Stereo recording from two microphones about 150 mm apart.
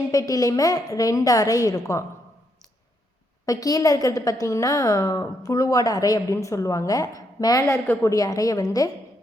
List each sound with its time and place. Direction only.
0.1 s a woman's voice: 20° left (ahead or behind)
3.4 s a woman's voice: 25° left (ahead or behind)